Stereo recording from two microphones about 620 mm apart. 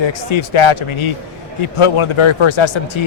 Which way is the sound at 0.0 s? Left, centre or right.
Left.